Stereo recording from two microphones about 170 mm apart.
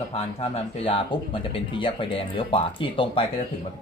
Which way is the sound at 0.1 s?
40° left (ahead or behind).